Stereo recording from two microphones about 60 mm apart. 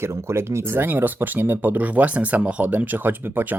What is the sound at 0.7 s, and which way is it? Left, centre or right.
Speech, right.